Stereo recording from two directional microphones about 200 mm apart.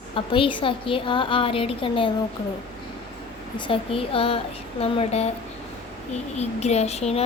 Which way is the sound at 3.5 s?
25° left (ahead or behind).